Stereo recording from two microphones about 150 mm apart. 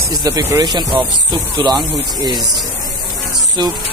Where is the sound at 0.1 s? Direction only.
25° right (ahead or behind).